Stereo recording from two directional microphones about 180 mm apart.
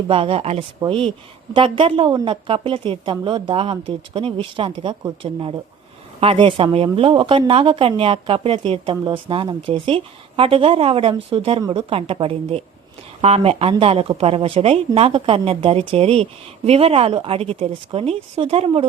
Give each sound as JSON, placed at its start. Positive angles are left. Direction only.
{"t": 0.1, "sound": "speech", "side_deg": -30}